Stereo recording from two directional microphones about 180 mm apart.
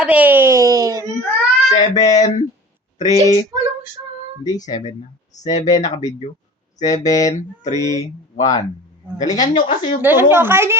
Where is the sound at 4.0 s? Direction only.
20° right (ahead or behind).